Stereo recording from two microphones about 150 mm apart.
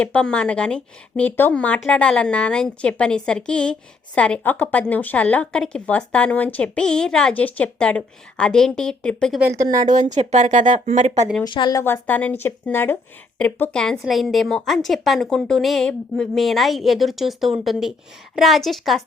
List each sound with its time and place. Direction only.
0.0 s speech: 5° left (ahead or behind)
9.8 s speech: 55° right (ahead or behind)
11.4 s a woman's voice: 30° left (ahead or behind)
11.8 s speech: 15° left (ahead or behind)